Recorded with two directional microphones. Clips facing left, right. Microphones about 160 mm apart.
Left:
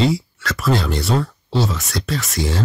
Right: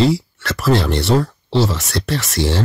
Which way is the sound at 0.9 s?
75° right (ahead or behind).